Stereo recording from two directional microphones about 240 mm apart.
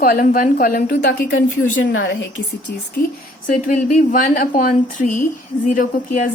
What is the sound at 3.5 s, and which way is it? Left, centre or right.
A woman's voice, left.